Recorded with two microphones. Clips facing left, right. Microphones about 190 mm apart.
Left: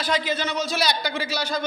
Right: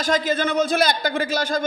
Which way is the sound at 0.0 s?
45° right (ahead or behind).